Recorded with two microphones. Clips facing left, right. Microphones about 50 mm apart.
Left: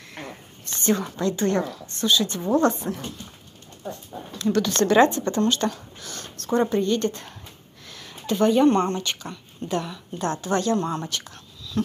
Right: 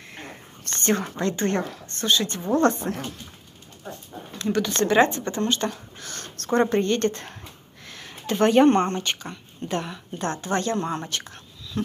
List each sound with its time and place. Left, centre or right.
0.7 s a woman's voice: right
4.4 s speech: right
5.9 s speech: right
7.8 s a sound: right
8.4 s a woman's voice: right
11.7 s speech: right